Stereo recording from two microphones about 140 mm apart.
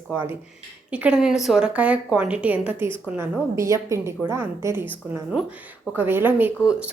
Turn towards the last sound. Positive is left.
turn(degrees=-10)  # may be behind; listen again after turning